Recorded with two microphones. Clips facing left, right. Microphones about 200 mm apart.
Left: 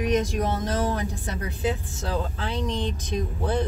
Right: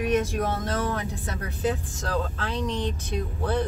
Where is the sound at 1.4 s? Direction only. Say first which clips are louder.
Even; 10° left (ahead or behind).